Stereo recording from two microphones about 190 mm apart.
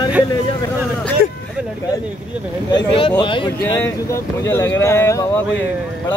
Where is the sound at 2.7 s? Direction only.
25° left (ahead or behind).